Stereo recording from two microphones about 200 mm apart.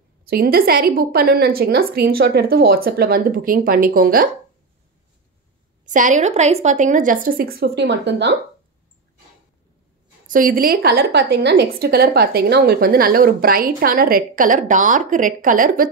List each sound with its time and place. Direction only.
0.2 s a woman's voice: 50° right (ahead or behind)
5.9 s speech: 40° right (ahead or behind)
7.5 s a woman's voice: 55° right (ahead or behind)
10.2 s a woman's voice: 45° right (ahead or behind)